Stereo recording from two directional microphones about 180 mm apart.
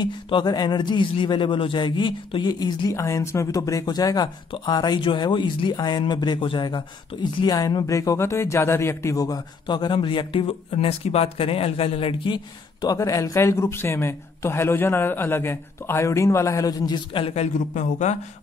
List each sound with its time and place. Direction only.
0.0 s speech: 25° left (ahead or behind)
12.8 s speech: 15° left (ahead or behind); by 18.1 s 40° left (ahead or behind)